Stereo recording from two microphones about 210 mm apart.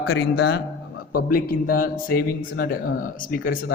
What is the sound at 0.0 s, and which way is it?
Speech, 50° left (ahead or behind).